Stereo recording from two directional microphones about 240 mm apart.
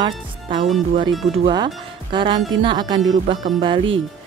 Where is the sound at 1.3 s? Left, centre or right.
Right.